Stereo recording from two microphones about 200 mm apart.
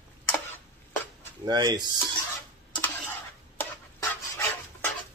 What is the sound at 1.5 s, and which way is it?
Speech, 20° right (ahead or behind).